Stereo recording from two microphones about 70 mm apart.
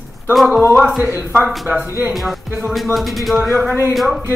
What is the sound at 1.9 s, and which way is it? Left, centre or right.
Speech, right.